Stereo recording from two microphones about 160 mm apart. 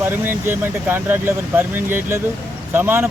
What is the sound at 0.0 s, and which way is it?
Speech, 15° right (ahead or behind).